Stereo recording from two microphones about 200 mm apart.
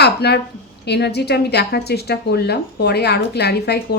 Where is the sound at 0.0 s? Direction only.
55° left (ahead or behind).